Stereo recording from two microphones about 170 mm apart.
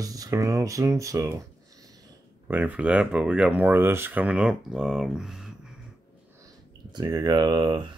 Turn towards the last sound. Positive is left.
turn(degrees=-25)  # may be behind; listen again after turning